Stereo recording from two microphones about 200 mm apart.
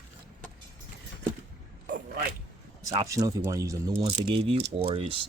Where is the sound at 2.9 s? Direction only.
15° right (ahead or behind).